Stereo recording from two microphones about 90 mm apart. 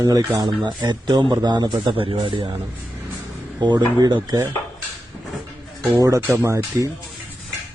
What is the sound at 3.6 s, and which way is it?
Speech, 50° right (ahead or behind).